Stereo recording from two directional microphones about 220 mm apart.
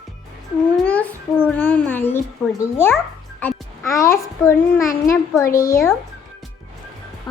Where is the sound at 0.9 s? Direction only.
5° left (ahead or behind).